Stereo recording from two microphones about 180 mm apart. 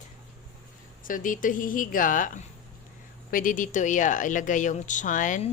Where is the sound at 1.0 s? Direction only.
50° left (ahead or behind).